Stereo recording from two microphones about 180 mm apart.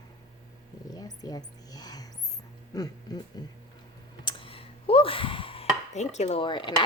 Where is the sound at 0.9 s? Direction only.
20° left (ahead or behind).